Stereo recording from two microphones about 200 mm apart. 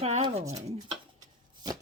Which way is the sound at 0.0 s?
30° right (ahead or behind).